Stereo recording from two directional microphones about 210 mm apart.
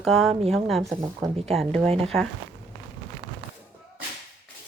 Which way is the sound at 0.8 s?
15° right (ahead or behind).